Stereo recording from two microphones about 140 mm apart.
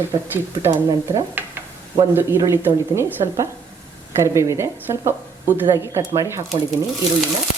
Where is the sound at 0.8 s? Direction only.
25° right (ahead or behind).